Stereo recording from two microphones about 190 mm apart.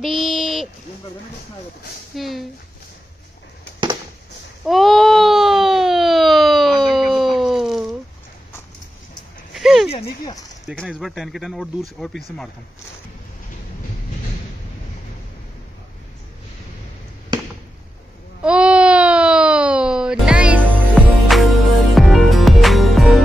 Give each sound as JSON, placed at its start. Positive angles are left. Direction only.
{"t": 0.0, "sound": "speech", "side_deg": 0}
{"t": 2.1, "sound": "a man's voice", "side_deg": 0}
{"t": 4.6, "sound": "a sound", "side_deg": 0}
{"t": 9.5, "sound": "dog", "side_deg": 0}
{"t": 9.8, "sound": "speech", "side_deg": 30}
{"t": 10.8, "sound": "a man's voice", "side_deg": 0}
{"t": 18.4, "sound": "a sound", "side_deg": -5}